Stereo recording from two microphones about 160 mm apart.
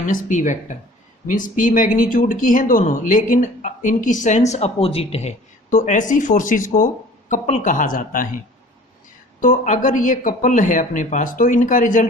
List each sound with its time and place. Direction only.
0.1 s speech: 55° left (ahead or behind); by 5.3 s 40° left (ahead or behind)
5.7 s speech: 50° left (ahead or behind)
9.4 s speech: 55° left (ahead or behind)